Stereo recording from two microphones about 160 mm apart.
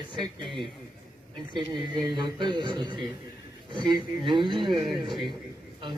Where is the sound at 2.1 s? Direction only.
30° right (ahead or behind).